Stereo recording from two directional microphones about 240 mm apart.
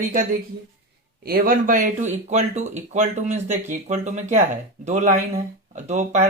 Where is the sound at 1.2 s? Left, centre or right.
Right.